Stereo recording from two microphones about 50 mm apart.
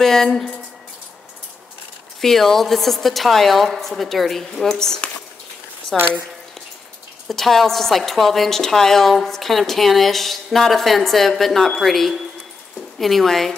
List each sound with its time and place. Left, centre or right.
0.0 s a woman's voice: centre
2.2 s a woman's voice: centre
7.2 s a woman's voice: centre